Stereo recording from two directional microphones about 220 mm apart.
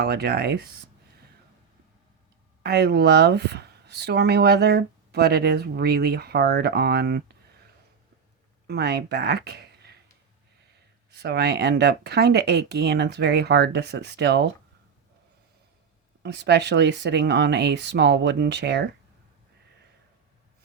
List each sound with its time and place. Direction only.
0.0 s speech: 45° right (ahead or behind)
2.6 s speech: 45° right (ahead or behind)
8.6 s speech: 50° right (ahead or behind)
11.1 s speech: 50° right (ahead or behind)
16.2 s speech: 50° right (ahead or behind)